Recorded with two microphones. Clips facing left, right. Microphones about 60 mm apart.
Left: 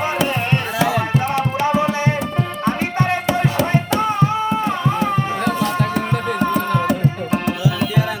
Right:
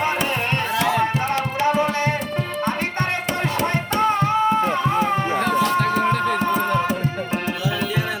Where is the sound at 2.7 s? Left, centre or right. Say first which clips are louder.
Left 6 dB; centre.